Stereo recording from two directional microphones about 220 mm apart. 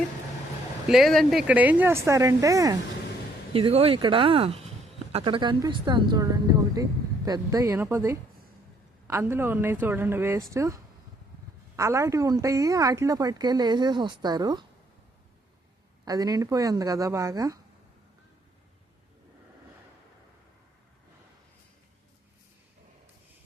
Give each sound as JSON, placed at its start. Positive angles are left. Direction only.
{"t": 0.9, "sound": "a woman's voice", "side_deg": 0}
{"t": 3.5, "sound": "a woman's voice", "side_deg": -25}
{"t": 11.8, "sound": "a woman's voice", "side_deg": -15}
{"t": 16.0, "sound": "a woman's voice", "side_deg": -15}